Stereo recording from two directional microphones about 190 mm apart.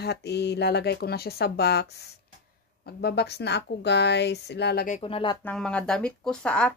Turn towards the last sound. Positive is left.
turn(degrees=5)  # may be behind; listen again after turning